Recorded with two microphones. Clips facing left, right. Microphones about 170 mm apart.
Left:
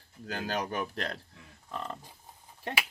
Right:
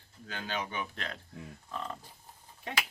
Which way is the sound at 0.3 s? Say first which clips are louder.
Left 4 dB; 40° left (ahead or behind).